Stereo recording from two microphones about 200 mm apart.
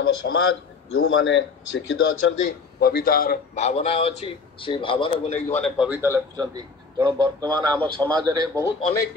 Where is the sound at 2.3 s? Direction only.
45° left (ahead or behind); by 5.4 s 25° left (ahead or behind).